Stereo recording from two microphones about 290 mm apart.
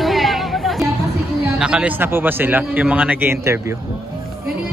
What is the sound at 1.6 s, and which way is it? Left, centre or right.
A man's voice, centre.